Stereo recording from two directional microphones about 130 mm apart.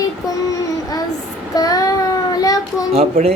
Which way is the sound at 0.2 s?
25° left (ahead or behind).